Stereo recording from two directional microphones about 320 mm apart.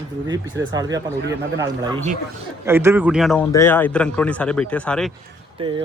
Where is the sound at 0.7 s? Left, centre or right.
Centre.